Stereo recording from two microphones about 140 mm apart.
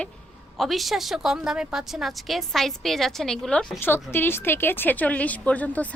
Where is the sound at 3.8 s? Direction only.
15° left (ahead or behind).